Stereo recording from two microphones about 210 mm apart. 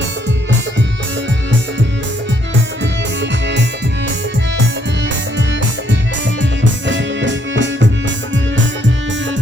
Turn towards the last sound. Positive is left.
turn(degrees=-60)  # may be behind; listen again after turning